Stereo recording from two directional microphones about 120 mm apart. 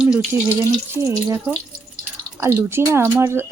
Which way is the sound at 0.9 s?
25° right (ahead or behind).